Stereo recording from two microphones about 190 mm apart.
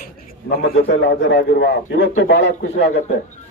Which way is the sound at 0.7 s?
70° left (ahead or behind).